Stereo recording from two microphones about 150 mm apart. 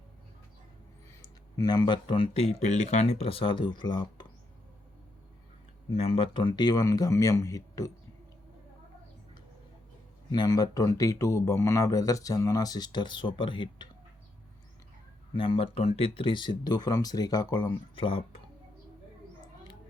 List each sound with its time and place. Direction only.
1.2 s speech: 25° left (ahead or behind)
2.6 s speech: 50° left (ahead or behind); by 4.3 s 30° left (ahead or behind)
5.9 s speech: 40° left (ahead or behind); by 7.9 s 20° left (ahead or behind)
10.3 s speech: 25° left (ahead or behind)
15.4 s speech: 35° left (ahead or behind)